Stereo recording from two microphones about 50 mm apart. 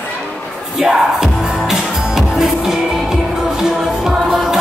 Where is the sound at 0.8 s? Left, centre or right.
Centre.